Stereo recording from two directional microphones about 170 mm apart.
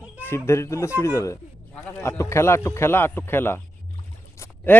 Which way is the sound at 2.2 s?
15° left (ahead or behind).